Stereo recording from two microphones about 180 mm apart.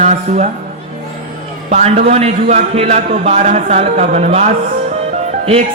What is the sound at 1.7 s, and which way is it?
A man's voice, 40° right (ahead or behind).